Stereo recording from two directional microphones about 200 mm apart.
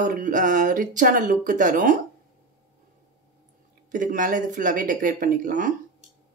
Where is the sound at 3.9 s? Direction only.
40° right (ahead or behind).